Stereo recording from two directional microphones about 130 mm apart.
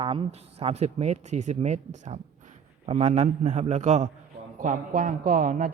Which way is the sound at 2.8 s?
55° right (ahead or behind).